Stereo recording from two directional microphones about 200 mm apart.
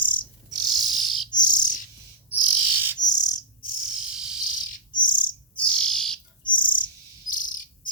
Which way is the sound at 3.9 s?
5° right (ahead or behind).